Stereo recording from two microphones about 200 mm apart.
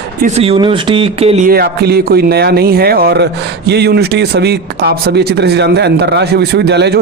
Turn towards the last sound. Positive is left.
turn(degrees=-55)  # may be behind; listen again after turning